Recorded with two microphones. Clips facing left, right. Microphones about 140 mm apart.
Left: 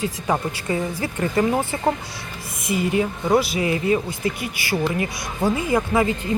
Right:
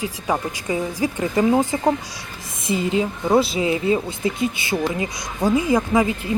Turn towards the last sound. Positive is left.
turn(degrees=-10)  # may be behind; listen again after turning